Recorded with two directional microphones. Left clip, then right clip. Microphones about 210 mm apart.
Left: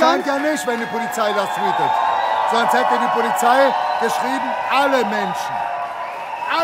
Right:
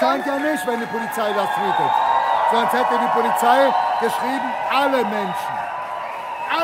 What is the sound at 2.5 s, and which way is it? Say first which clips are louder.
A man's voice: left 2 dB; 5° left (ahead or behind).